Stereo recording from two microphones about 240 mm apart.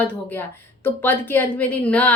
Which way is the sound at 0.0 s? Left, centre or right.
Centre.